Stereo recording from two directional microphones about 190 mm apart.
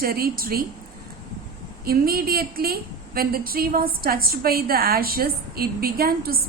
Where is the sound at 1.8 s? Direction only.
50° right (ahead or behind).